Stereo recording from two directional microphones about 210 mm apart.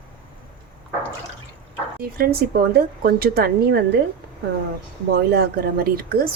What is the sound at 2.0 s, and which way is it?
A woman's voice, 45° right (ahead or behind).